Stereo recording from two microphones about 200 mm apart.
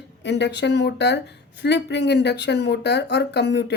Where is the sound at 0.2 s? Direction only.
60° left (ahead or behind).